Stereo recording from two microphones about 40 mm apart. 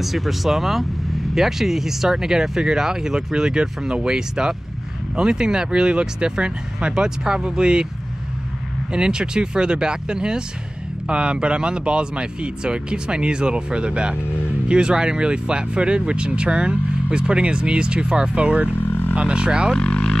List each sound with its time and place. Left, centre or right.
0.0 s speech: centre; by 7.9 s right
8.9 s speech: right
18.4 s speech: right
18.9 s a sound: left
19.1 s speech: right
19.8 s vehicle: left